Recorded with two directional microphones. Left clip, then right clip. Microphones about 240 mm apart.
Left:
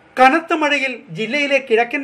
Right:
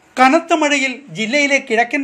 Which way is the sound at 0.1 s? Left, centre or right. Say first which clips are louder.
Right 1 dB; right.